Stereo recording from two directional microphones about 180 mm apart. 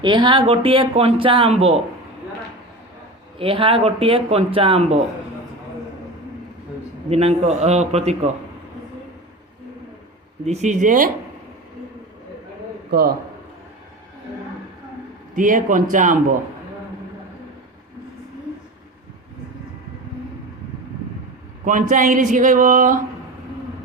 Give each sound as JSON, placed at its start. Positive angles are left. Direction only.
{"t": 0.0, "sound": "speech", "side_deg": -25}
{"t": 3.3, "sound": "speech", "side_deg": -30}
{"t": 7.1, "sound": "speech", "side_deg": -35}
{"t": 10.4, "sound": "speech", "side_deg": -40}
{"t": 12.9, "sound": "a man's voice", "side_deg": -55}
{"t": 15.4, "sound": "speech", "side_deg": -45}
{"t": 21.6, "sound": "speech", "side_deg": -45}